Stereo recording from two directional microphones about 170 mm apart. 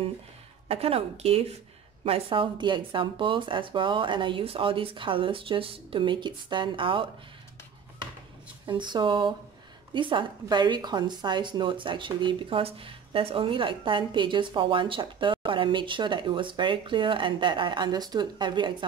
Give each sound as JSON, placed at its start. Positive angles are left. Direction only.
{"t": 0.7, "sound": "a woman's voice", "side_deg": -35}
{"t": 8.6, "sound": "a woman's voice", "side_deg": -25}